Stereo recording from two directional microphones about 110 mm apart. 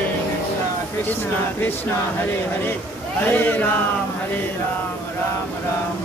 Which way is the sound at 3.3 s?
15° left (ahead or behind).